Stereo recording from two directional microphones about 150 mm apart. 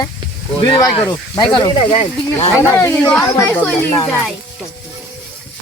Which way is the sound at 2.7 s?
15° left (ahead or behind).